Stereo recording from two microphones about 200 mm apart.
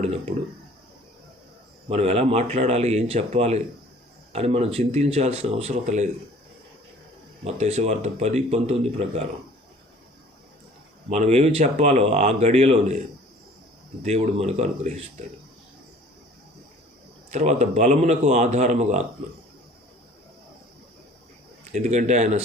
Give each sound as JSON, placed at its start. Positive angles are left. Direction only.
{"t": 1.9, "sound": "speech", "side_deg": -30}
{"t": 7.4, "sound": "speech", "side_deg": -30}
{"t": 11.1, "sound": "speech", "side_deg": -35}
{"t": 14.0, "sound": "speech", "side_deg": -35}
{"t": 17.3, "sound": "speech", "side_deg": -35}
{"t": 21.7, "sound": "speech", "side_deg": -35}